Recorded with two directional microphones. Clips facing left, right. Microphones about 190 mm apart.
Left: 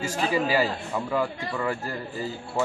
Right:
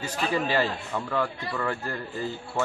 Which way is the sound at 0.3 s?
5° left (ahead or behind).